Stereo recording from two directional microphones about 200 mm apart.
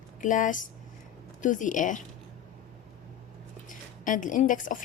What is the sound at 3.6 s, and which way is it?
A woman's voice, 40° left (ahead or behind).